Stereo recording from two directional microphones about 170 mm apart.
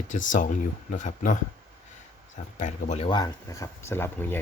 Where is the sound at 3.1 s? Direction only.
25° left (ahead or behind).